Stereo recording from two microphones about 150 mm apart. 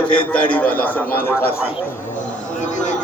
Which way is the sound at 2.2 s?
55° left (ahead or behind).